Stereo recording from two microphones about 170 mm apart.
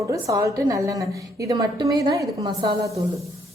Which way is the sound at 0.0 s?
20° right (ahead or behind).